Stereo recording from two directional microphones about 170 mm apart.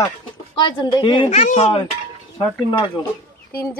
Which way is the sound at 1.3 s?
40° left (ahead or behind).